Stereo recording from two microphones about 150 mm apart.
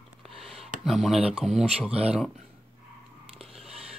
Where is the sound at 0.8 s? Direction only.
Centre (ahead or behind).